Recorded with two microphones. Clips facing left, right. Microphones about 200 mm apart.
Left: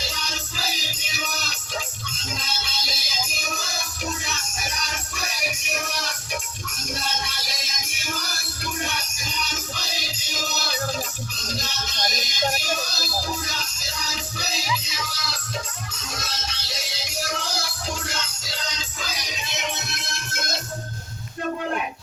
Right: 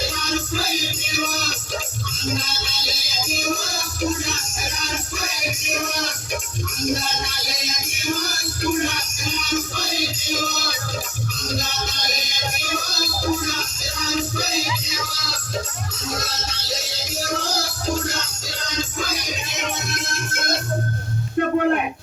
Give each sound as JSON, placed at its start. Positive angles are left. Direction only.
{"t": 0.0, "sound": "music", "side_deg": -50}
{"t": 6.9, "sound": "music", "side_deg": -50}
{"t": 13.4, "sound": "music", "side_deg": -50}
{"t": 21.3, "sound": "a sound", "side_deg": -60}